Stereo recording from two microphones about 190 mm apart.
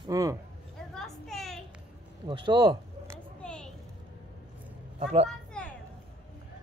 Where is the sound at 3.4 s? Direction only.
5° left (ahead or behind).